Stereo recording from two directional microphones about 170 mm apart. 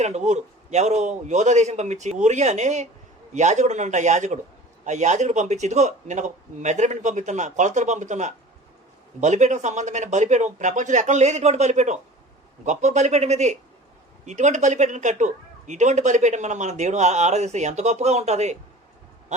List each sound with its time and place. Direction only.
0.0 s speech: 40° right (ahead or behind)